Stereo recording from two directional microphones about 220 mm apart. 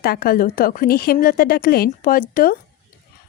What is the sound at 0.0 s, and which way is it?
A woman's voice, 45° left (ahead or behind).